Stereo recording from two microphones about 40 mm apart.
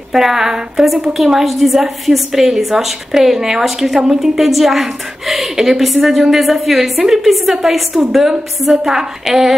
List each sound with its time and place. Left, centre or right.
0.1 s a woman's voice: centre
4.4 s a woman's voice: centre